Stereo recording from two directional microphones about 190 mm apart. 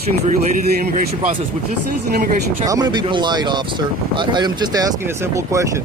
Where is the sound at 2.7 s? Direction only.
20° right (ahead or behind).